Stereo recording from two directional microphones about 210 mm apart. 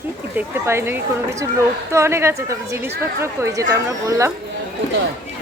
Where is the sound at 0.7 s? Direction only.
10° right (ahead or behind).